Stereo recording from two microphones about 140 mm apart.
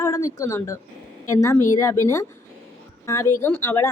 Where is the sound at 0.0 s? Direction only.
25° left (ahead or behind).